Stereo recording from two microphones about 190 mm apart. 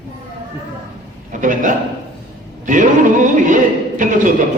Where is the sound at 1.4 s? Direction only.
45° right (ahead or behind).